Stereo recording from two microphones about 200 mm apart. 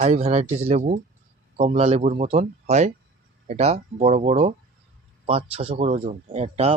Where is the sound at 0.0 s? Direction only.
35° right (ahead or behind).